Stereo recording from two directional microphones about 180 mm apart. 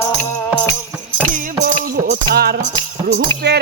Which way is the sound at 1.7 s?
45° right (ahead or behind).